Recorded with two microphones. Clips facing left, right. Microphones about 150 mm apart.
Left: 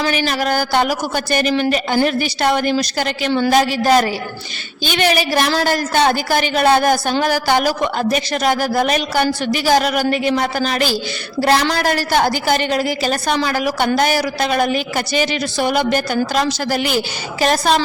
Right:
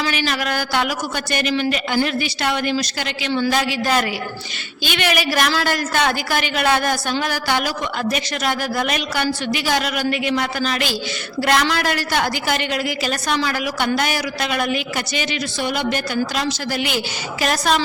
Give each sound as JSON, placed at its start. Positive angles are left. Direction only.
{"t": 0.0, "sound": "a woman's voice", "side_deg": 40}
{"t": 3.5, "sound": "a woman's voice", "side_deg": 40}
{"t": 17.4, "sound": "a woman's voice", "side_deg": 30}